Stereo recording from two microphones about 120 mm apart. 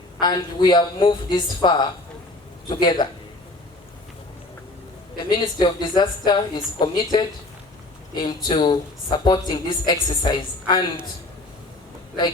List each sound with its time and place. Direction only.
0.2 s a woman's voice: 35° left (ahead or behind)
5.3 s a woman's voice: 40° left (ahead or behind)